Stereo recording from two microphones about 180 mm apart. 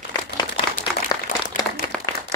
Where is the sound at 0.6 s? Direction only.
25° left (ahead or behind).